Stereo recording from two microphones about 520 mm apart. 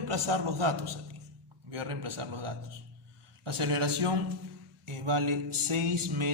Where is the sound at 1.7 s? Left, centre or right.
Right.